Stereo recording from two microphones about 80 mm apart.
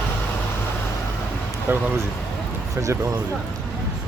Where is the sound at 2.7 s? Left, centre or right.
Right.